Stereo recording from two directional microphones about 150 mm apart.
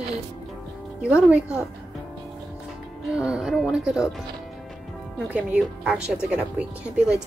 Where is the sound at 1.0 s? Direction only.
5° right (ahead or behind).